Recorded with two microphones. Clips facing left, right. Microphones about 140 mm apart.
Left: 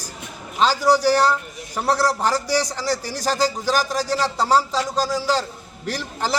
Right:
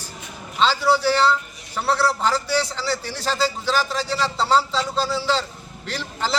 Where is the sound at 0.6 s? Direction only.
10° left (ahead or behind).